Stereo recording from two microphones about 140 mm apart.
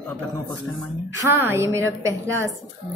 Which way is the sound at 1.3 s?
15° right (ahead or behind).